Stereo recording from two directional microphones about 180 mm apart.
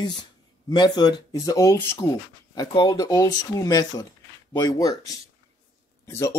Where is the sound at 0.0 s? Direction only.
25° left (ahead or behind).